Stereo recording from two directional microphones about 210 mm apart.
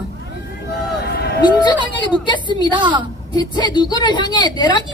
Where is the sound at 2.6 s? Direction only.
20° right (ahead or behind).